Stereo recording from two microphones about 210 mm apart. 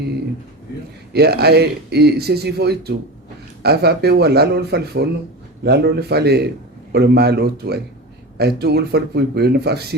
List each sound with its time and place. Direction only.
1.1 s speech: 50° right (ahead or behind)